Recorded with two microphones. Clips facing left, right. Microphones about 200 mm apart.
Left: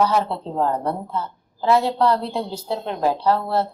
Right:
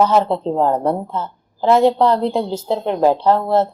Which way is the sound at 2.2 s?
60° right (ahead or behind).